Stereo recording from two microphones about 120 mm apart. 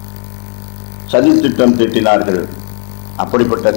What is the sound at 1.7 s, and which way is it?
A man's voice, 15° left (ahead or behind).